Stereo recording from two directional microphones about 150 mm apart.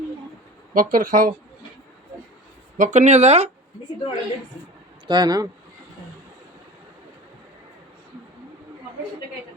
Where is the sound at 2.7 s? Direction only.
55° right (ahead or behind).